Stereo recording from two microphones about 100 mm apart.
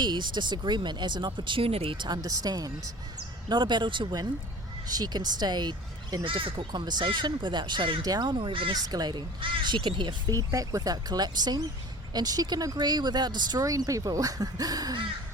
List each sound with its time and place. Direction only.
0.0 s speech: 50° right (ahead or behind)
4.9 s speech: 40° right (ahead or behind)
6.2 s speech: 60° right (ahead or behind)
6.7 s speech: 45° right (ahead or behind)
8.0 s speech: 40° right (ahead or behind); by 8.7 s 60° right (ahead or behind)
8.7 s speech: 40° right (ahead or behind)
10.3 s speech: 35° right (ahead or behind)